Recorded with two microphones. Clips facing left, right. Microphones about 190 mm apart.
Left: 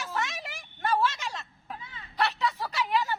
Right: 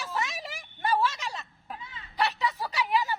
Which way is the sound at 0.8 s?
10° right (ahead or behind).